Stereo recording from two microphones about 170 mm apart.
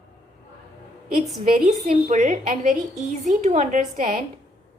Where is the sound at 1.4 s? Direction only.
45° right (ahead or behind).